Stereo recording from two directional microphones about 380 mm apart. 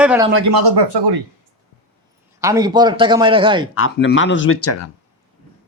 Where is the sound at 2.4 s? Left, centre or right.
Centre.